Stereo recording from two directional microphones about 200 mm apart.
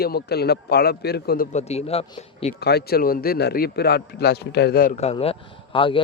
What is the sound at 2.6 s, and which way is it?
A man's voice, 55° left (ahead or behind).